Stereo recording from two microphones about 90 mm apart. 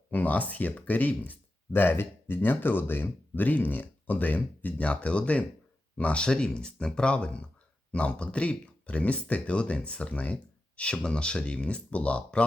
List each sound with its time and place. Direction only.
0.1 s speech: 20° left (ahead or behind)